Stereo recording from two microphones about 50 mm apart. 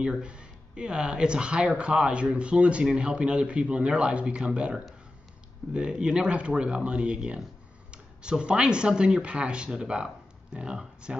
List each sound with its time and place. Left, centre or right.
0.0 s speech: centre